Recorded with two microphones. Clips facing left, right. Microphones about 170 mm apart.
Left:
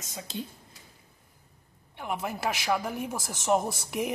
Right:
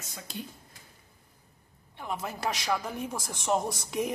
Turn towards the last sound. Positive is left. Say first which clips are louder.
# even
turn(degrees=15)  # may be behind; listen again after turning